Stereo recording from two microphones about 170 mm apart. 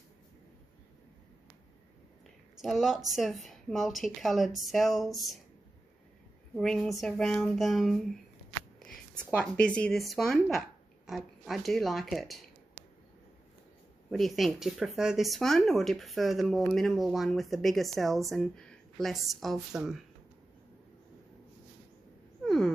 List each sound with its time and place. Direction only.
2.5 s a woman's voice: centre (ahead or behind)
6.5 s speech: centre (ahead or behind)
14.1 s speech: centre (ahead or behind)